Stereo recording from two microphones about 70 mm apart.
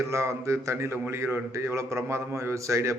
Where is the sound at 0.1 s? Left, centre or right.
Right.